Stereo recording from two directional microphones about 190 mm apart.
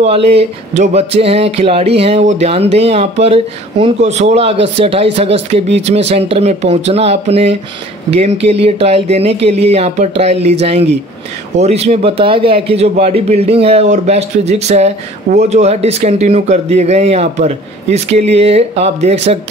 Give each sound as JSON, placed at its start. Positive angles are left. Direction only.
{"t": 0.0, "sound": "a man's voice", "side_deg": -30}